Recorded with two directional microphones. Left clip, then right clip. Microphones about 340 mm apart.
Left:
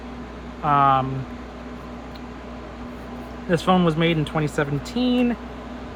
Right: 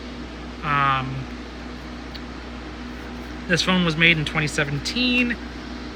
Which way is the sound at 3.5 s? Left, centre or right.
Centre.